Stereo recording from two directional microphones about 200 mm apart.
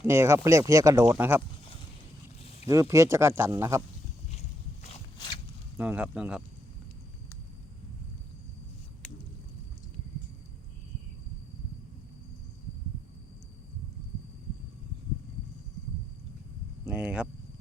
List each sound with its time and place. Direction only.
0.0 s speech: 15° right (ahead or behind)
2.4 s a sound: 30° left (ahead or behind)
2.9 s speech: 15° right (ahead or behind)
4.3 s a sound: 35° left (ahead or behind)
5.7 s speech: 10° right (ahead or behind)
16.8 s speech: 5° right (ahead or behind)